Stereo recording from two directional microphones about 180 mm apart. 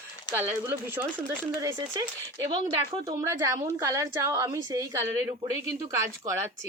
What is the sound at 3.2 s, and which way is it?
A woman's voice, 20° right (ahead or behind).